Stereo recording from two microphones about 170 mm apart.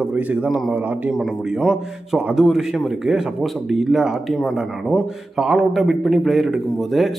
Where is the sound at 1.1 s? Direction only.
Centre (ahead or behind).